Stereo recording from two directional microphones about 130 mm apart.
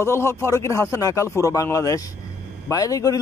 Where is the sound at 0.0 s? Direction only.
20° left (ahead or behind).